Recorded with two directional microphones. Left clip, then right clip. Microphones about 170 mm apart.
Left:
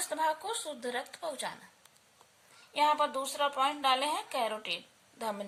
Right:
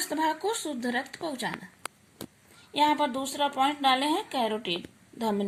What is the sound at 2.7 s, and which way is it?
Speech, 50° right (ahead or behind).